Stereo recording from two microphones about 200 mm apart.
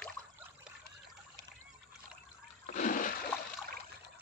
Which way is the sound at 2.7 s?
40° left (ahead or behind).